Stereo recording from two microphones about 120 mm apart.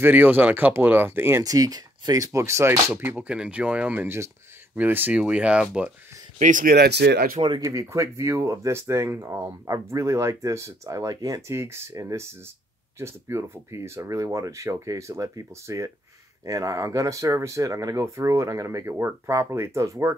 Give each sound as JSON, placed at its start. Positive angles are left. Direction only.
{"t": 0.0, "sound": "speech", "side_deg": -15}
{"t": 1.4, "sound": "speech", "side_deg": -30}
{"t": 6.3, "sound": "speech", "side_deg": -90}
{"t": 7.3, "sound": "speech", "side_deg": -45}
{"t": 7.6, "sound": "speech", "side_deg": -25}